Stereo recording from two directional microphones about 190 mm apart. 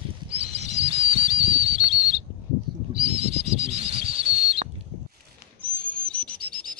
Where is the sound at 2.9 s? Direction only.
30° right (ahead or behind).